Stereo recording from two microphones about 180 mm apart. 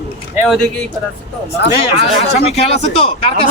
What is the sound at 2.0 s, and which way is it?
Speech, 35° left (ahead or behind).